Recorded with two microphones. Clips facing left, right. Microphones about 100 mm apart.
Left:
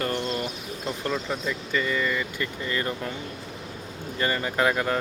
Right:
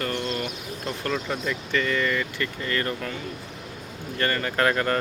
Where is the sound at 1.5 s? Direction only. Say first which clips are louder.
Right 2 dB; 15° left (ahead or behind).